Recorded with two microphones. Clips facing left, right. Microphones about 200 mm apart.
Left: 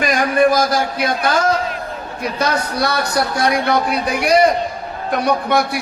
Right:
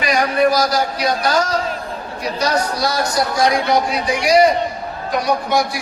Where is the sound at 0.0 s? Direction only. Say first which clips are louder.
Left 1 dB; 50° left (ahead or behind).